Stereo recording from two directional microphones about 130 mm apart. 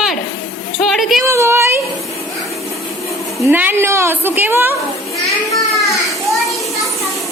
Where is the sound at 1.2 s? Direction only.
20° right (ahead or behind).